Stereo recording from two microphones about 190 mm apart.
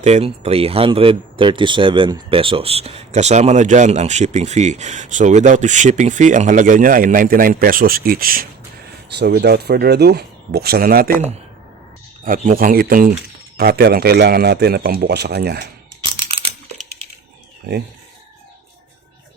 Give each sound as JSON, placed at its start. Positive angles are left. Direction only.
{"t": 0.0, "sound": "speech", "side_deg": -35}
{"t": 12.2, "sound": "speech", "side_deg": -45}
{"t": 16.3, "sound": "a sound", "side_deg": -35}